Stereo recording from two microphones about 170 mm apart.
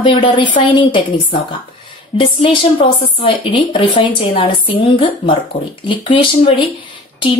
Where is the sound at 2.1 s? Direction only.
30° left (ahead or behind).